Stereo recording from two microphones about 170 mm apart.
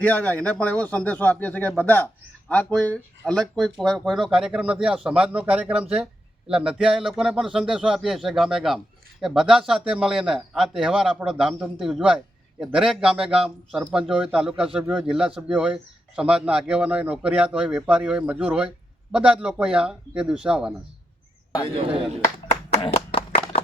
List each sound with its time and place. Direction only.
0.0 s a man's voice: 10° left (ahead or behind)
22.7 s clapping: 40° left (ahead or behind)